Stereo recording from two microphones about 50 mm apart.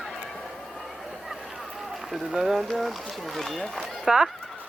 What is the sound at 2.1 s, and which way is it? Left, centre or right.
Speech, centre.